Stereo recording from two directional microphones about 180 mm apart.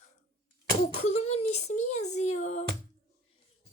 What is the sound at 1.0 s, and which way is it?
Music, 35° left (ahead or behind).